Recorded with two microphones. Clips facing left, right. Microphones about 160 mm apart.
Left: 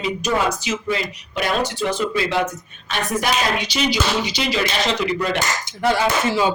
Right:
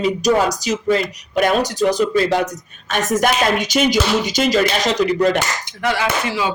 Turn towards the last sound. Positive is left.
turn(degrees=25)  # may be behind; listen again after turning